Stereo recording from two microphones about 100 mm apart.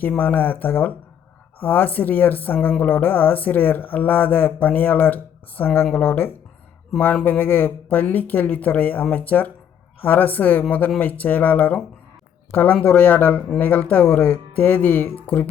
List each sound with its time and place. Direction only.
0.2 s a woman's voice: 20° left (ahead or behind)